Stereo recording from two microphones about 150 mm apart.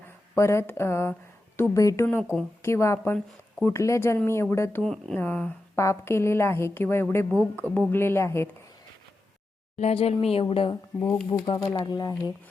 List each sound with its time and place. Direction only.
0.3 s a woman's voice: 20° left (ahead or behind)
4.8 s a woman's voice: 5° left (ahead or behind)
9.7 s speech: 45° left (ahead or behind)
11.0 s a woman's voice: 10° left (ahead or behind)
11.4 s speech: 30° left (ahead or behind)